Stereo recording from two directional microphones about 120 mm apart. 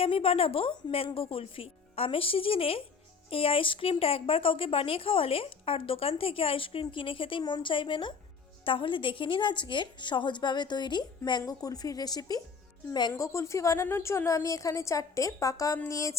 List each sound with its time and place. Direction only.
0.0 s a woman's voice: 50° left (ahead or behind); by 16.1 s 25° left (ahead or behind)